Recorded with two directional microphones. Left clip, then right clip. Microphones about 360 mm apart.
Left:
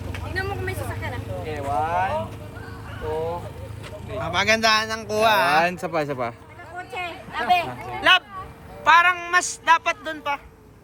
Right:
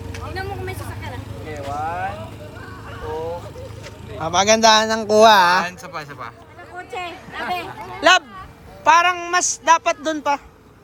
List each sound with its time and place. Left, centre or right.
0.3 s vehicle: centre
1.5 s vehicle: left
4.2 s a man's voice: centre
4.9 s speech: right
5.2 s a man's voice: centre
5.6 s speech: centre
6.7 s a man's voice: centre